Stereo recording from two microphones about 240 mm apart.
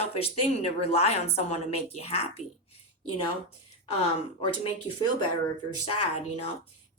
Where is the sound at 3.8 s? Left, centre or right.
Left.